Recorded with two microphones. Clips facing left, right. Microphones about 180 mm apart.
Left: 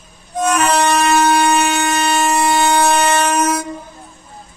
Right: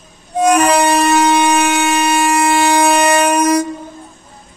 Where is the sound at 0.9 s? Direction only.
35° right (ahead or behind).